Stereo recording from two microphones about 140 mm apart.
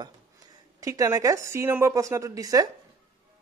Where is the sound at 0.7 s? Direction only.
25° right (ahead or behind).